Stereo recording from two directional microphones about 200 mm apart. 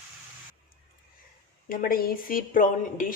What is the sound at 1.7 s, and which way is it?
Speech, 45° left (ahead or behind).